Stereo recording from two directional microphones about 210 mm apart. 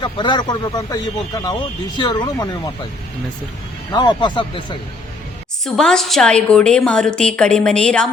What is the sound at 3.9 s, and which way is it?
Speech, 20° left (ahead or behind).